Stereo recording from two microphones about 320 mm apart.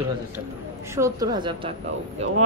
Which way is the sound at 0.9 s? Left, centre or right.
Centre.